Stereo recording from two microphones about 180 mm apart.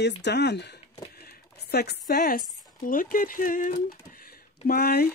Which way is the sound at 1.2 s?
65° left (ahead or behind).